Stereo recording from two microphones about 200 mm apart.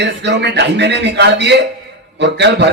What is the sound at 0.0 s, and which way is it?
A man's voice, 60° right (ahead or behind).